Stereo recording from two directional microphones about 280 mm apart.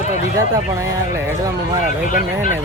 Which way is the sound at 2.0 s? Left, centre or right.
Left.